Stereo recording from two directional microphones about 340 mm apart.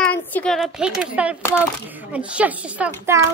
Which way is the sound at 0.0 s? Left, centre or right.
Centre.